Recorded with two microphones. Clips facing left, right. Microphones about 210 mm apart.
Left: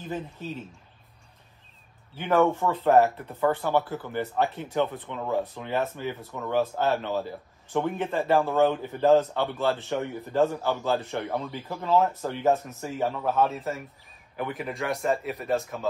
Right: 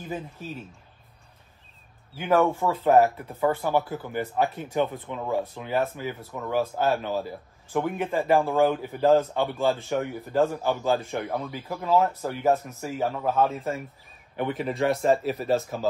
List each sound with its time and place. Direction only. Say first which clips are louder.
2.1 s a man's voice: even; 10° right (ahead or behind)
13.6 s speech: right 2 dB; centre (ahead or behind)
14.6 s speech: right 6 dB; 30° right (ahead or behind)